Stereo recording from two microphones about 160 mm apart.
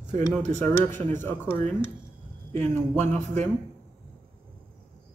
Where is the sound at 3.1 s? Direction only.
45° right (ahead or behind).